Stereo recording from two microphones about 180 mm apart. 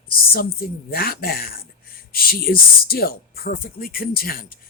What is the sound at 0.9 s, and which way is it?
Speech, 55° left (ahead or behind).